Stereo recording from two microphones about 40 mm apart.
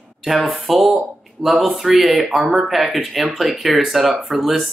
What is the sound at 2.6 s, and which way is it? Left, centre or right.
Speech, centre.